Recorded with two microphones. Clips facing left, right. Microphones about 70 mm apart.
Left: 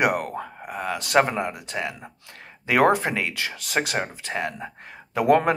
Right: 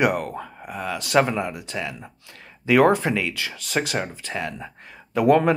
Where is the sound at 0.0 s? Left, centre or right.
Left.